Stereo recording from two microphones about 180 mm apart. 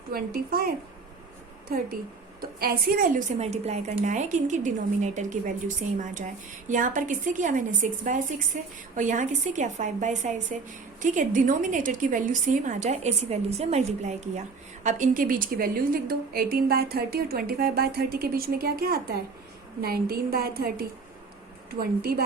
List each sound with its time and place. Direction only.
0.1 s a woman's voice: 55° right (ahead or behind)
1.7 s a woman's voice: 55° right (ahead or behind)